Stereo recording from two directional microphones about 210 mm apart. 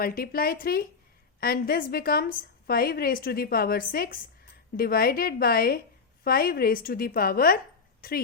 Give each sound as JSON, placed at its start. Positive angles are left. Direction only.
{"t": 0.0, "sound": "a woman's voice", "side_deg": 45}